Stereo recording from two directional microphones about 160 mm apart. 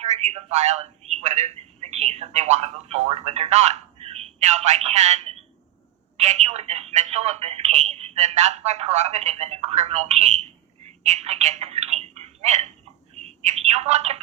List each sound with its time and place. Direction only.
0.0 s speech: 40° right (ahead or behind)
10.8 s telephone: 40° right (ahead or behind)
13.2 s a woman's voice: 45° right (ahead or behind)